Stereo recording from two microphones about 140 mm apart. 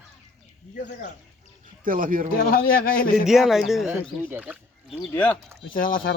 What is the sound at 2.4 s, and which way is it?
Speech, 90° left.